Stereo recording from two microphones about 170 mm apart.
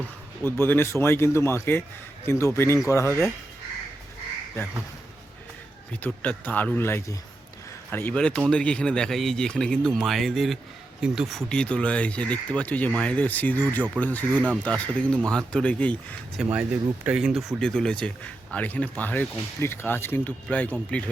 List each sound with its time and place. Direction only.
0.6 s speech: 15° left (ahead or behind)
6.0 s speech: 10° left (ahead or behind)
16.4 s speech: 10° right (ahead or behind); by 21.0 s 5° left (ahead or behind)